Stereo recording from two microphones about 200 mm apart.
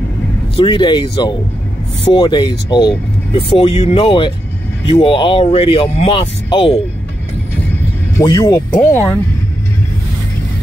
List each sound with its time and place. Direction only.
0.6 s speech: 25° left (ahead or behind)
8.2 s speech: 20° left (ahead or behind)
8.7 s speech: 10° left (ahead or behind)